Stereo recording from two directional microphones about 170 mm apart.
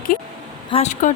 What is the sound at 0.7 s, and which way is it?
Speech, 40° left (ahead or behind).